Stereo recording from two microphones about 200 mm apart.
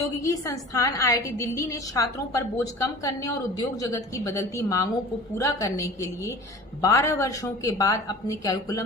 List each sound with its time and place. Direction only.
0.2 s a woman's voice: 15° left (ahead or behind)